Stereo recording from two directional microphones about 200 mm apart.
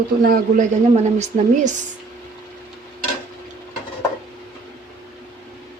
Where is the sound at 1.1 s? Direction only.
35° right (ahead or behind).